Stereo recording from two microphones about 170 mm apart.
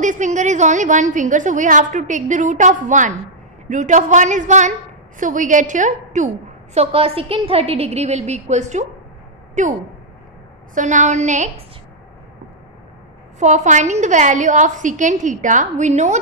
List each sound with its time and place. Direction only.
0.0 s a woman's voice: 45° right (ahead or behind)
13.4 s a woman's voice: 45° right (ahead or behind)